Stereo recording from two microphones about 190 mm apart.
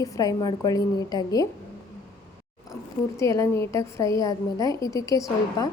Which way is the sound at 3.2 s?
15° left (ahead or behind).